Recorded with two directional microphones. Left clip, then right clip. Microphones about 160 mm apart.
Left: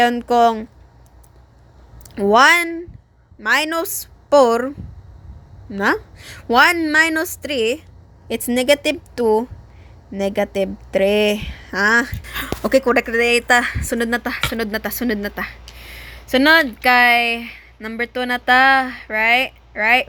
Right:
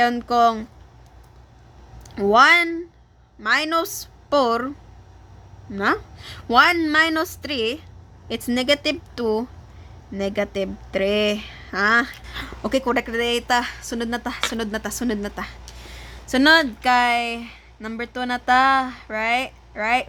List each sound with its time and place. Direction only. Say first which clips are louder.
0.2 s a woman's voice: left 3 dB; 20° left (ahead or behind)
2.1 s a woman's voice: left 2 dB; 20° left (ahead or behind)
5.7 s a woman's voice: left 3 dB; 20° left (ahead or behind)
14.5 s a woman's voice: left 4 dB; 5° left (ahead or behind)